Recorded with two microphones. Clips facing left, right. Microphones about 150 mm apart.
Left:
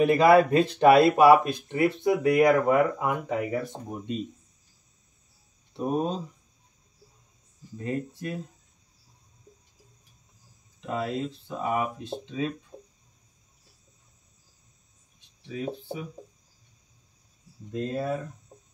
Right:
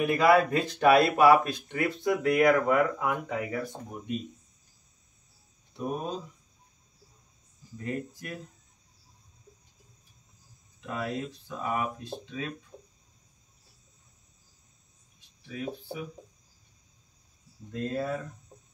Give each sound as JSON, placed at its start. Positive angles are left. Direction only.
{"t": 0.0, "sound": "speech", "side_deg": 30}
{"t": 5.8, "sound": "speech", "side_deg": 30}
{"t": 7.7, "sound": "speech", "side_deg": 25}
{"t": 10.9, "sound": "speech", "side_deg": 25}
{"t": 15.1, "sound": "a sound", "side_deg": 20}
{"t": 17.6, "sound": "speech", "side_deg": 15}
{"t": 18.5, "sound": "music", "side_deg": 30}